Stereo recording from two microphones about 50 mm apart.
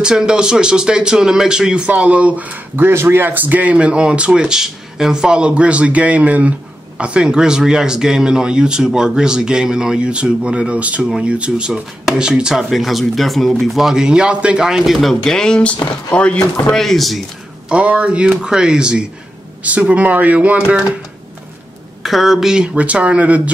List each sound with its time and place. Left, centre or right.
0.0 s speech: centre
1.9 s speech: right
2.7 s speech: right
3.7 s speech: centre
12.5 s speech: centre
14.0 s speech: centre
15.0 s speech: centre; by 16.3 s left
16.7 s speech: centre
17.6 s speech: right
19.6 s speech: right
20.3 s speech: centre
22.0 s speech: centre
22.6 s speech: right